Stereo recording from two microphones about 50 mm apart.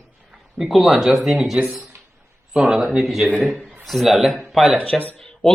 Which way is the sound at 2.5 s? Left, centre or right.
Centre.